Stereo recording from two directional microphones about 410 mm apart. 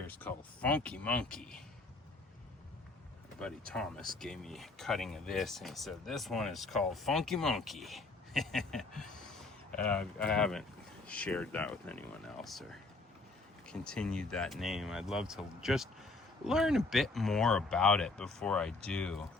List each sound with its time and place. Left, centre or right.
0.1 s speech: centre
3.3 s speech: centre